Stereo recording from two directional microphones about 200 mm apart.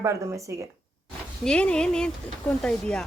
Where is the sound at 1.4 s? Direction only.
5° left (ahead or behind).